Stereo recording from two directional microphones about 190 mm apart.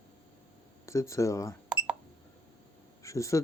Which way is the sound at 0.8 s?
15° left (ahead or behind).